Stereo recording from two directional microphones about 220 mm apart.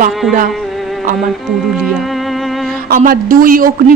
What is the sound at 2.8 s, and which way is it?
Speech, 40° right (ahead or behind).